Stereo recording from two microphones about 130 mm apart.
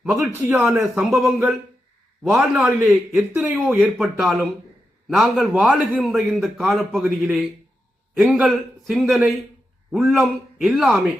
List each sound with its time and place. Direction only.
0.0 s a man's voice: 5° right (ahead or behind)
0.3 s a man's voice: 15° right (ahead or behind)
1.1 s a man's voice: centre (ahead or behind)
3.4 s a man's voice: 15° right (ahead or behind)
3.9 s a man's voice: centre (ahead or behind)